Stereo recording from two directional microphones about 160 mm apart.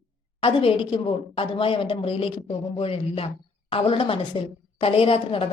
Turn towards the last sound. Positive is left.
turn(degrees=35)  # may be behind; listen again after turning